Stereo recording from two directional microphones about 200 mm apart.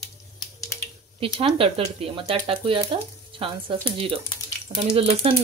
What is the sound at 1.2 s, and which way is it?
A woman's voice, 25° right (ahead or behind).